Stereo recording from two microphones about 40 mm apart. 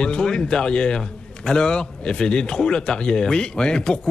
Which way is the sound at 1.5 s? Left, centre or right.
Left.